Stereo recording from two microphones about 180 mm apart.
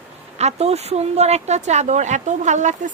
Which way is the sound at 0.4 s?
35° right (ahead or behind).